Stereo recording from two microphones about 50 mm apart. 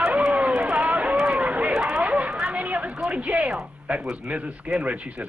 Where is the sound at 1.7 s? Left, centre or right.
Centre.